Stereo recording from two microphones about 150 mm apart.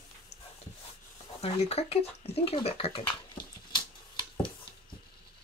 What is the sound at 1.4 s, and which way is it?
Speech, 45° left (ahead or behind).